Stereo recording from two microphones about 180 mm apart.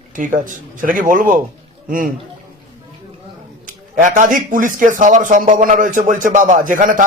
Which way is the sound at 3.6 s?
45° right (ahead or behind).